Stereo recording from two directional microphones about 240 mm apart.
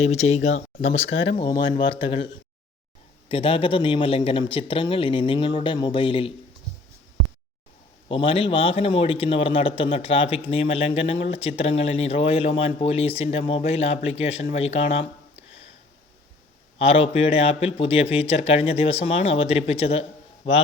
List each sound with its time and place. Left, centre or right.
0.2 s speech: left
0.5 s speech: left
1.4 s speech: centre
3.2 s speech: left
8.0 s speech: left
16.7 s speech: left